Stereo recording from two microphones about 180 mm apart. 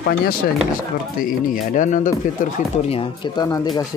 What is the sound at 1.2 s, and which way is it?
Speech, 45° left (ahead or behind).